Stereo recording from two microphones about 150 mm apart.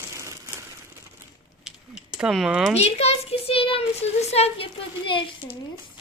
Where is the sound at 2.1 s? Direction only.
5° right (ahead or behind).